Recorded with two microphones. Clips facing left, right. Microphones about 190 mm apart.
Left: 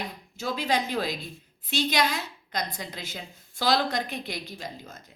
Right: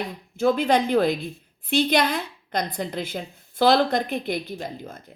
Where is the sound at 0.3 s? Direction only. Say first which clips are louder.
Right 8 dB; 55° right (ahead or behind).